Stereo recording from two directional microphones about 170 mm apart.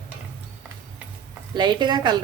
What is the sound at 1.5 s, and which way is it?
Speech, 25° right (ahead or behind).